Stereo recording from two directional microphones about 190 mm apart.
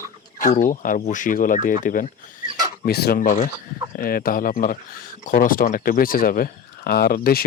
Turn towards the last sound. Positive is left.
turn(degrees=50)  # may be behind; listen again after turning